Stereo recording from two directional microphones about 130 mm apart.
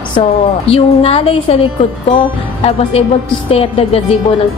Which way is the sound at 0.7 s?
50° left (ahead or behind).